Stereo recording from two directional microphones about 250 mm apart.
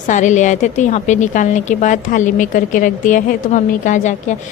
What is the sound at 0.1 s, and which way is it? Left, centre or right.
A woman's voice, left.